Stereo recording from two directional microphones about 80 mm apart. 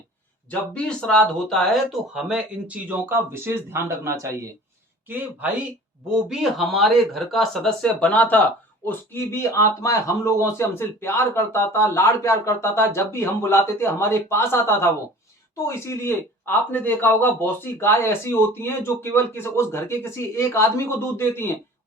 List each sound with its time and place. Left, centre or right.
0.7 s speech: centre; by 4.4 s right
5.0 s speech: right
6.1 s speech: centre
8.9 s a man's voice: left